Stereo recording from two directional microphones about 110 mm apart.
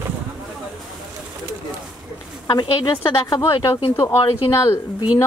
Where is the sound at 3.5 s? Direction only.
55° left (ahead or behind).